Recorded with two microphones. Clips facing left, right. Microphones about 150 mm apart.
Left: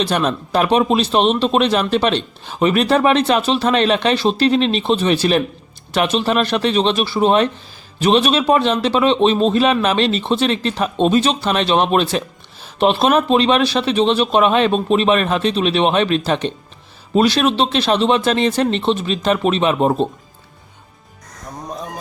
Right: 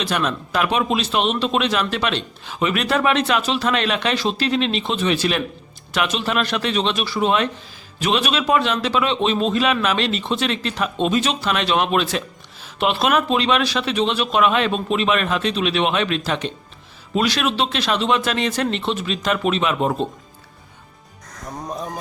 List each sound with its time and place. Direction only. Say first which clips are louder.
0.0 s a man's voice: left 4 dB; 30° left (ahead or behind)